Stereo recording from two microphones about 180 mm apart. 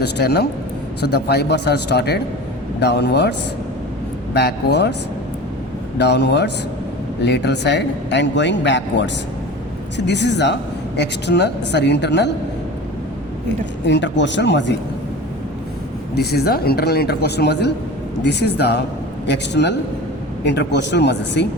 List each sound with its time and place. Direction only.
0.0 s speech: 65° left (ahead or behind)
4.4 s speech: 65° left (ahead or behind)
6.0 s speech: 70° left (ahead or behind)
10.1 s speech: 70° left (ahead or behind)
13.8 s speech: 80° left
16.1 s speech: 65° left (ahead or behind)